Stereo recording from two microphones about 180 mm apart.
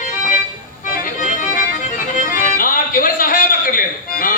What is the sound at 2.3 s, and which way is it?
Music, 50° left (ahead or behind).